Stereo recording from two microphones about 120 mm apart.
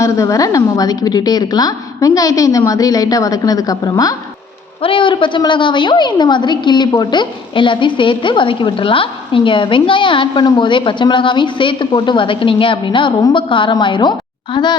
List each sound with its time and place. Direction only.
0.0 s a woman's voice: 25° left (ahead or behind)
4.8 s a woman's voice: 45° left (ahead or behind)